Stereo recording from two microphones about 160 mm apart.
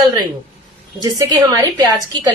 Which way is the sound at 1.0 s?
25° right (ahead or behind).